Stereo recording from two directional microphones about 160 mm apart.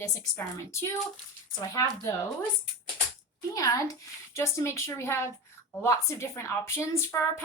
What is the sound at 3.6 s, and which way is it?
A woman's voice, 20° left (ahead or behind).